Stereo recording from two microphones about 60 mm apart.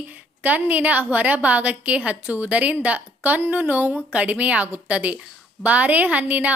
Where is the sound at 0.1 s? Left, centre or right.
Right.